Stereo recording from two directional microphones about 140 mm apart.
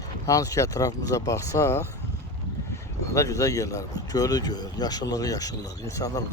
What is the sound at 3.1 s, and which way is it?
Speech, 25° left (ahead or behind).